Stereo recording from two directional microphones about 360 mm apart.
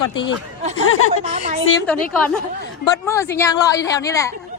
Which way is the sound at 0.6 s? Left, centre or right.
Centre.